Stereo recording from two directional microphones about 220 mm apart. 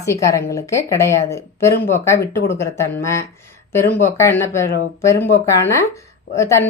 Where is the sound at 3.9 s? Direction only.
35° left (ahead or behind).